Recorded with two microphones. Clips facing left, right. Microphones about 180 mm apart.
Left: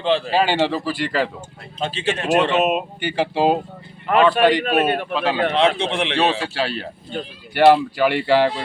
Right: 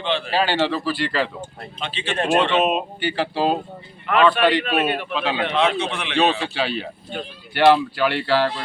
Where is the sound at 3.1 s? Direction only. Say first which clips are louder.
Left 4 dB; 15° left (ahead or behind).